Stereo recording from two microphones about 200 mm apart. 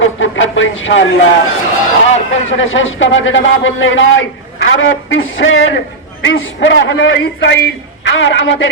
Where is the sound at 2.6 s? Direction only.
75° left (ahead or behind).